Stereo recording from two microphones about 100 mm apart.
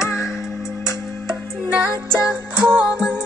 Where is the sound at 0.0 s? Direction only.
25° left (ahead or behind).